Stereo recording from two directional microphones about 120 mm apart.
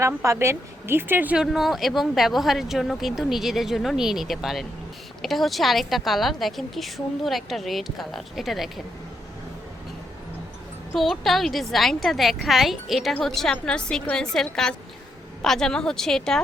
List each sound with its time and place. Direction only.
0.0 s speech: 25° right (ahead or behind)
1.5 s a woman's voice: centre (ahead or behind)
10.9 s a woman's voice: centre (ahead or behind)